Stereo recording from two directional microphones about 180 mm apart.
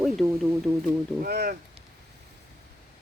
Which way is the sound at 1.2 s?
60° right (ahead or behind).